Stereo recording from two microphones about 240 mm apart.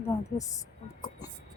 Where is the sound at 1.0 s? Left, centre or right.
Centre.